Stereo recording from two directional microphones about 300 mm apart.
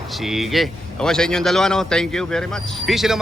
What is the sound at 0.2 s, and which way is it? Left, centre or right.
Speech, centre.